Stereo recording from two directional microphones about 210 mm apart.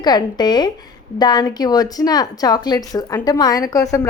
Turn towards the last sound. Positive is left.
turn(degrees=15)  # may be behind; listen again after turning